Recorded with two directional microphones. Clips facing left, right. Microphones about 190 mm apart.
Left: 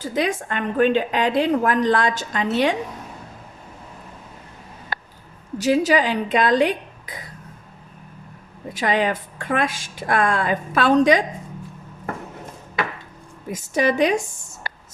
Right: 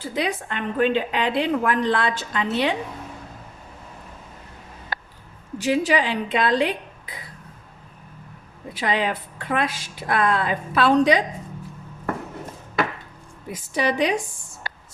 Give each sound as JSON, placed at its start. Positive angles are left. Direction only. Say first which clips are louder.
{"t": 0.0, "sound": "a woman's voice", "louder": "left 3 dB", "side_deg": 45}
{"t": 4.9, "sound": "a sound", "louder": "left 1 dB", "side_deg": 55}
{"t": 5.5, "sound": "a woman's voice", "louder": "left 3 dB", "side_deg": 40}
{"t": 8.7, "sound": "a woman's voice", "louder": "left 3 dB", "side_deg": 45}
{"t": 13.5, "sound": "a woman's voice", "louder": "left 3 dB", "side_deg": 45}